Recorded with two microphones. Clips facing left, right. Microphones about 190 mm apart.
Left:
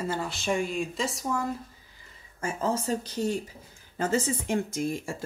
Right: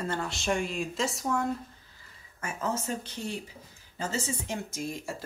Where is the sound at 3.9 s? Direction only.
55° left (ahead or behind).